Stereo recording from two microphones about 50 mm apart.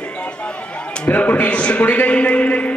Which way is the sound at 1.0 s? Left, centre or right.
Left.